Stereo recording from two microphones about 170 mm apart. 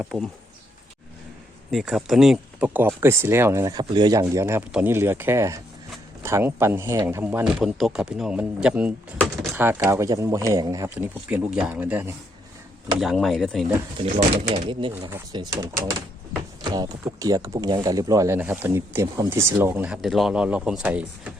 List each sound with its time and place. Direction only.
0.0 s speech: centre (ahead or behind)
1.7 s speech: 5° right (ahead or behind)
9.1 s door: 5° left (ahead or behind)
9.6 s speech: 15° right (ahead or behind)
10.8 s speech: 10° right (ahead or behind)
13.0 s speech: centre (ahead or behind)
14.0 s speech: 35° right (ahead or behind); by 21.3 s 5° right (ahead or behind)